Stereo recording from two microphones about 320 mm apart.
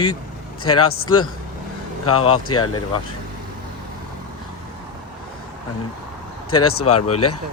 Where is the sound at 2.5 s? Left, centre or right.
Left.